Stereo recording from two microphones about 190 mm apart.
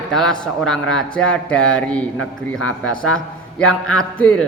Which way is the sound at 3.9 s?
5° left (ahead or behind).